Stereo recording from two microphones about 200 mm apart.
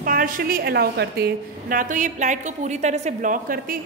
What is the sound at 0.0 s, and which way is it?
A woman's voice, 45° right (ahead or behind).